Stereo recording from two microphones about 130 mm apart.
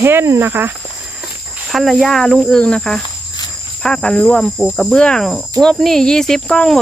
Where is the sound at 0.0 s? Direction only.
20° right (ahead or behind).